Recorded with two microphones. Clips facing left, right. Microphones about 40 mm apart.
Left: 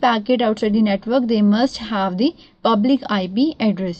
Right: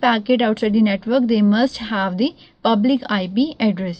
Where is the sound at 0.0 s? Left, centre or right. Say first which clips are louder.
Even; centre.